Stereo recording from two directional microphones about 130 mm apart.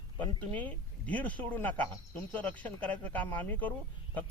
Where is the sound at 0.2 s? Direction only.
10° left (ahead or behind).